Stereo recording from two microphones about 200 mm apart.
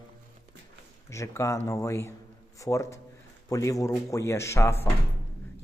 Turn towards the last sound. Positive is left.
turn(degrees=15)  # may be behind; listen again after turning